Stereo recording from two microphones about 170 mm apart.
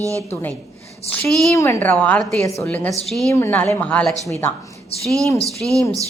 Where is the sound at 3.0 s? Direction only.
Centre (ahead or behind).